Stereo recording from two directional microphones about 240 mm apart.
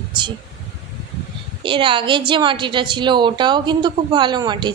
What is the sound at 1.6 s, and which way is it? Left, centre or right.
A woman's voice, right.